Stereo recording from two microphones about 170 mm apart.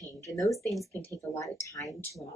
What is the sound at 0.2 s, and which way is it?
Speech, 20° left (ahead or behind).